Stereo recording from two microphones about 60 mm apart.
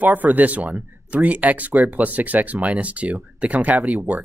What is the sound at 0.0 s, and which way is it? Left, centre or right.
Speech, right.